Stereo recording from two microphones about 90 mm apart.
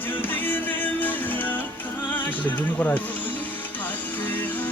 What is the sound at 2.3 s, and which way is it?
Speech, 20° left (ahead or behind).